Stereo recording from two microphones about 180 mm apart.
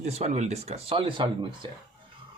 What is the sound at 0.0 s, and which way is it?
Speech, 35° right (ahead or behind).